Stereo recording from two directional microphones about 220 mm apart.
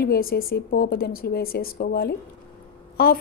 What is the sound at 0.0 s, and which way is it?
Speech, 45° left (ahead or behind).